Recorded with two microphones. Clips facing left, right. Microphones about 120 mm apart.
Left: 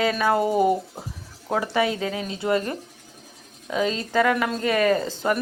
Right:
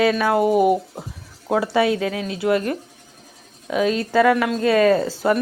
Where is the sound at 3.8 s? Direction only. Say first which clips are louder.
Right 5 dB; 20° left (ahead or behind).